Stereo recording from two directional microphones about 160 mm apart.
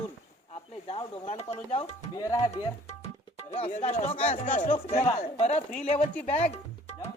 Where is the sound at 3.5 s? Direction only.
40° left (ahead or behind).